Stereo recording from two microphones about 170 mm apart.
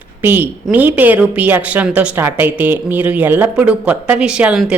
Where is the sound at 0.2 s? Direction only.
10° right (ahead or behind).